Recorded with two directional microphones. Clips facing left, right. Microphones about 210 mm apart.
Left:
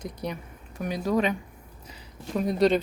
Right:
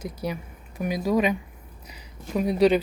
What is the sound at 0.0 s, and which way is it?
Speech, 5° right (ahead or behind).